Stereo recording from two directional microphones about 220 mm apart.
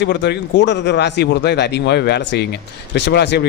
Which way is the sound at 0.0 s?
50° left (ahead or behind).